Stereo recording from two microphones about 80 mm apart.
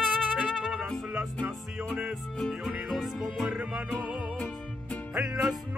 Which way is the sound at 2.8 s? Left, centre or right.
Centre.